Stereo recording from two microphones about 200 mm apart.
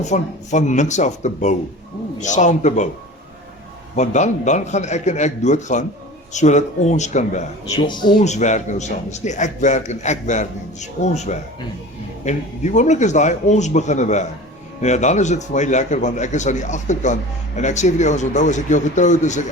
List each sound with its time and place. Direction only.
0.0 s a man's voice: 35° left (ahead or behind)
3.9 s a man's voice: 35° left (ahead or behind)
7.8 s speech: 20° left (ahead or behind)
8.2 s a man's voice: 35° left (ahead or behind)